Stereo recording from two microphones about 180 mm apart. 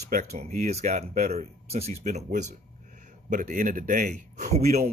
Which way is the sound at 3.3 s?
45° right (ahead or behind).